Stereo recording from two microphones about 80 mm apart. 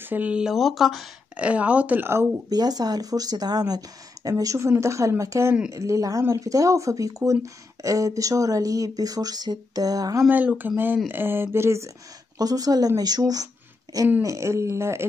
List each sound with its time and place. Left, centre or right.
0.0 s speech: right
0.6 s speech: centre
1.3 s speech: centre
2.5 s speech: right
10.3 s speech: right
12.4 s speech: right
14.2 s speech: right